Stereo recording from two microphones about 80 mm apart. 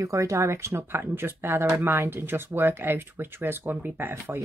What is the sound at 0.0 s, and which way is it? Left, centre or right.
Speech, right.